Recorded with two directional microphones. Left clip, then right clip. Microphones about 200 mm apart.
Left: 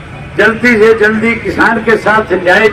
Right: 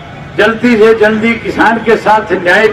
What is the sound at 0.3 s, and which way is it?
A man's voice, 40° right (ahead or behind).